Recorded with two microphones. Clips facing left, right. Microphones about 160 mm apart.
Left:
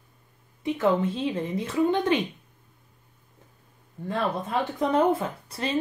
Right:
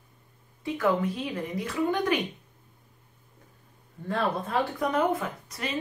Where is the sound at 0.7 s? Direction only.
25° left (ahead or behind).